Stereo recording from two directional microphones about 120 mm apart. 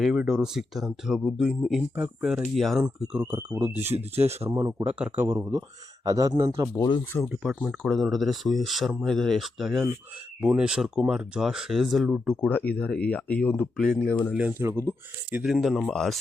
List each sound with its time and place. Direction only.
0.0 s speech: 5° right (ahead or behind)
2.8 s speech: 15° right (ahead or behind)
3.8 s speech: 60° right (ahead or behind)
4.9 s speech: 10° right (ahead or behind)
5.2 s speech: 25° right (ahead or behind)
6.8 s speech: 15° left (ahead or behind)
7.3 s speech: 10° right (ahead or behind)
7.8 s speech: 5° left (ahead or behind)
12.5 s speech: 15° left (ahead or behind)
14.6 s speech: 20° right (ahead or behind)
15.4 s speech: 5° right (ahead or behind)